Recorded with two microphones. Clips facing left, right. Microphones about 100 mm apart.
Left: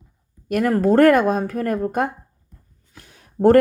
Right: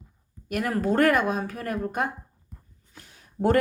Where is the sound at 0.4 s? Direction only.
45° left (ahead or behind).